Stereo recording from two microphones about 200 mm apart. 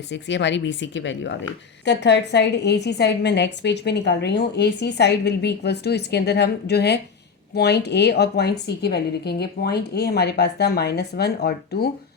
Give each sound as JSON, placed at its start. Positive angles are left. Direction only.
{"t": 0.1, "sound": "a woman's voice", "side_deg": 65}